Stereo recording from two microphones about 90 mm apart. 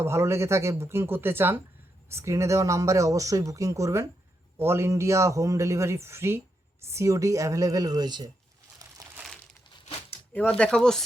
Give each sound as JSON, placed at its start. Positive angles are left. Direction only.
{"t": 0.0, "sound": "speech", "side_deg": -30}
{"t": 10.3, "sound": "speech", "side_deg": 15}